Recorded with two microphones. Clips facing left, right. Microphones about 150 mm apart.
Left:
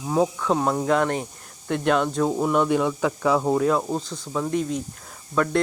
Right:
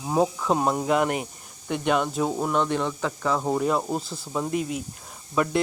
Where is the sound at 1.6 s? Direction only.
Centre (ahead or behind).